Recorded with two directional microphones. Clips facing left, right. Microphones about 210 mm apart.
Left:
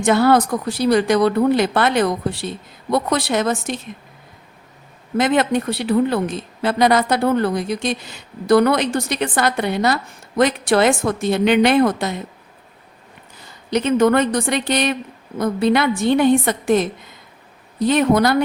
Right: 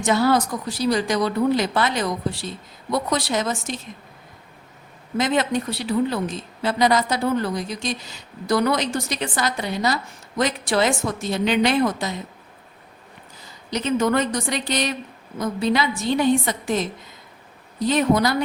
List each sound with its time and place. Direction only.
0.0 s a woman's voice: 60° left (ahead or behind)
5.1 s a woman's voice: 60° left (ahead or behind)
13.7 s a woman's voice: 60° left (ahead or behind)